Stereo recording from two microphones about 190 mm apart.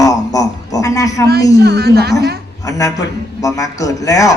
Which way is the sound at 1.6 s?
55° right (ahead or behind).